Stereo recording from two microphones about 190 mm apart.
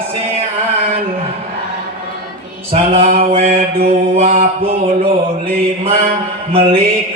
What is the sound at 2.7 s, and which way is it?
Music, 30° right (ahead or behind).